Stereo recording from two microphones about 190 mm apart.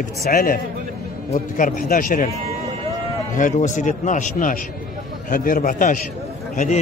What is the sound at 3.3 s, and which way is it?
A man's voice, 40° left (ahead or behind).